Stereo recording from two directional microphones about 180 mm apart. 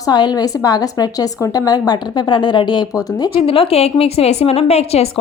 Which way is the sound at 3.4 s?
30° left (ahead or behind).